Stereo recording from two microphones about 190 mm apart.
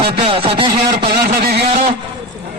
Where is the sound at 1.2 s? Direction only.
55° right (ahead or behind).